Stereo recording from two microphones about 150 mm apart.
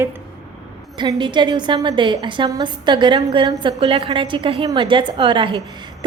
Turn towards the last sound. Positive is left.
turn(degrees=-30)  # may be behind; listen again after turning